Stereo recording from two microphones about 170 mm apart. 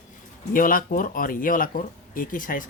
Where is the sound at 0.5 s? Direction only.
55° left (ahead or behind).